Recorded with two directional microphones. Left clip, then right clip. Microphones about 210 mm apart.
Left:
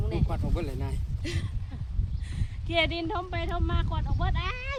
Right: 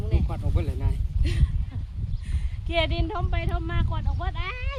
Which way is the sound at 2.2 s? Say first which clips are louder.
Left 1 dB; 10° right (ahead or behind).